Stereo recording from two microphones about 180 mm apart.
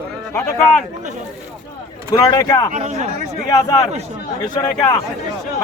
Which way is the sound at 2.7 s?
40° right (ahead or behind).